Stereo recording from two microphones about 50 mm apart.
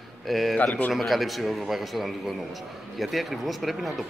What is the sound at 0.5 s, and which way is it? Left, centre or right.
Speech, left.